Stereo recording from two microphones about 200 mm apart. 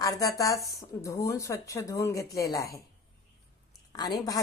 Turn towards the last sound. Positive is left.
turn(degrees=20)  # may be behind; listen again after turning